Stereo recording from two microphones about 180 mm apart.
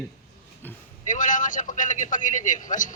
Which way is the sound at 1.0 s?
45° left (ahead or behind).